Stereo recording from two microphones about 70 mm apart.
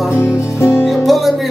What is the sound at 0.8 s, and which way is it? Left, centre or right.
Music, centre.